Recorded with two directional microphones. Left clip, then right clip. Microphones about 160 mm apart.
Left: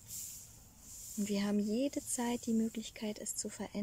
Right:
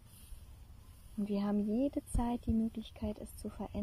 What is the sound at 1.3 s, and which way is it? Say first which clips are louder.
Speech: even; 10° left (ahead or behind).